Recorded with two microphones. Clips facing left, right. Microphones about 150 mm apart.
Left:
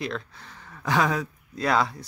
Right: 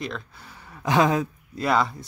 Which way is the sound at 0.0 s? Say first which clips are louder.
Left 1 dB; 5° right (ahead or behind).